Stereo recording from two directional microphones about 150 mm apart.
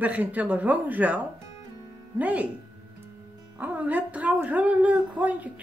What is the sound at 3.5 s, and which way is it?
Speech, 10° right (ahead or behind).